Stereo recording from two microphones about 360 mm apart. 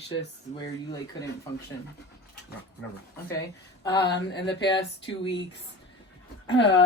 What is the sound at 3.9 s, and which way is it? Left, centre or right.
Mantra, left.